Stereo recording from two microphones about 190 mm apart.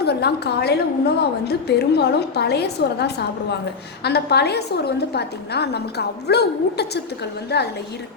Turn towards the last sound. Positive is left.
turn(degrees=60)  # may be behind; listen again after turning